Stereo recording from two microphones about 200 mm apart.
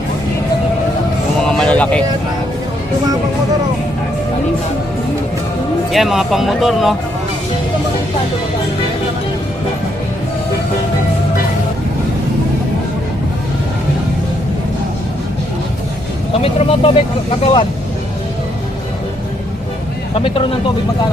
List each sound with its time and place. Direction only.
1.4 s a sound: 5° left (ahead or behind)
5.9 s speech: centre (ahead or behind)
16.4 s speech: 30° left (ahead or behind)
20.1 s speech: 25° left (ahead or behind)